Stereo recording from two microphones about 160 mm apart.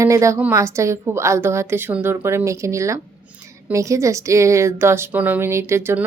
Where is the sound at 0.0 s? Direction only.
20° right (ahead or behind).